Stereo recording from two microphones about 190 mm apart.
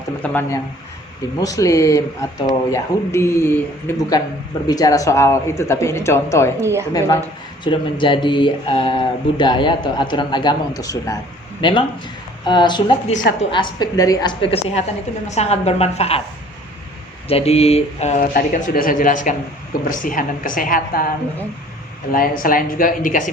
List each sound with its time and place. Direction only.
0.2 s speech: 10° left (ahead or behind)
7.6 s speech: 25° left (ahead or behind)
15.3 s mantra: 35° left (ahead or behind)
17.2 s mantra: 30° left (ahead or behind)
18.3 s a woman's voice: 45° left (ahead or behind)
22.1 s a woman's voice: 45° left (ahead or behind)